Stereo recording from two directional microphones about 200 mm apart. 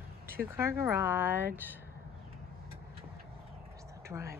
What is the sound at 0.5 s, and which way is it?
Speech, 15° right (ahead or behind).